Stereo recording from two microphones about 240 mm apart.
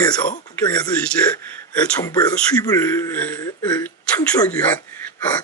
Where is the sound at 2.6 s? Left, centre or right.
Centre.